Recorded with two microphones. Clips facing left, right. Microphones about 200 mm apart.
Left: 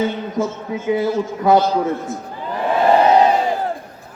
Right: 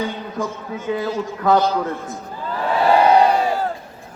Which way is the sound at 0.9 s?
15° left (ahead or behind).